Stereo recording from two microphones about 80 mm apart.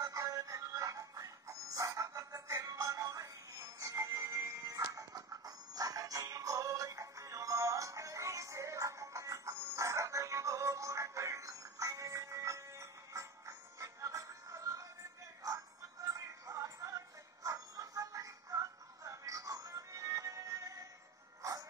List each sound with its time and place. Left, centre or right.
0.0 s music: right